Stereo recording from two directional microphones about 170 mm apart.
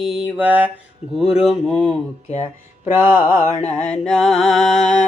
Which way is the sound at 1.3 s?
Centre (ahead or behind).